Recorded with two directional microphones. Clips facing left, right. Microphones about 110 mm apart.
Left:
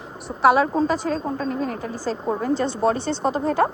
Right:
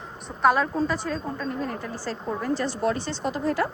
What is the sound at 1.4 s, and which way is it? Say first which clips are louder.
Speech: left 4 dB; 90° left.